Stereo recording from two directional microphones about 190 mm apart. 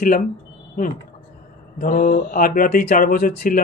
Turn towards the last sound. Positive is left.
turn(degrees=50)  # may be behind; listen again after turning